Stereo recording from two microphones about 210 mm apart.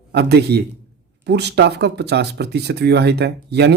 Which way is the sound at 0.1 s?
50° right (ahead or behind).